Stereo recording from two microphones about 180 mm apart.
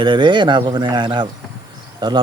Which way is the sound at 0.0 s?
25° right (ahead or behind).